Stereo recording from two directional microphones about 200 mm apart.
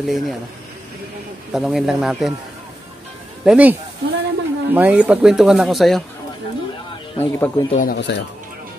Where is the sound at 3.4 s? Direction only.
5° right (ahead or behind).